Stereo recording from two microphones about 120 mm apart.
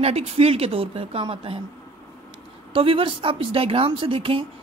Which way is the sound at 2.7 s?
50° right (ahead or behind).